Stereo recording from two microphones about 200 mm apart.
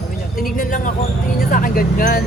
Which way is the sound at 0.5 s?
40° left (ahead or behind).